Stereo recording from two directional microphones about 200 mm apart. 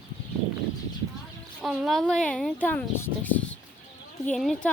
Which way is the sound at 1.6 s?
Centre (ahead or behind).